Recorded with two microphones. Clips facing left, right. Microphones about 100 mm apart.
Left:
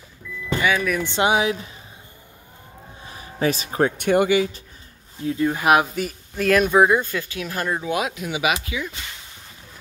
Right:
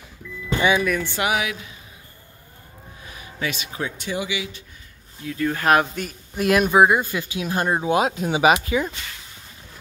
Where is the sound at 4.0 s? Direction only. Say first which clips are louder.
Left 11 dB; 55° left (ahead or behind).